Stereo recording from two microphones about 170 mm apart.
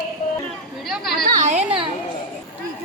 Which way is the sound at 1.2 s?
45° right (ahead or behind).